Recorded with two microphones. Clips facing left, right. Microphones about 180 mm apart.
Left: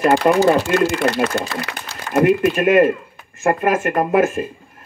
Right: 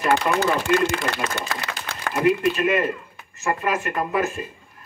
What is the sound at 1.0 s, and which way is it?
Speech, 65° left (ahead or behind).